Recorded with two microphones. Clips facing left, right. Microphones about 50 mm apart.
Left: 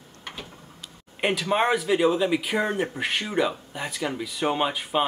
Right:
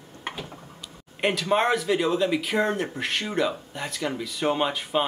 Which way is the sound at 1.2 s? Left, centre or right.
Centre.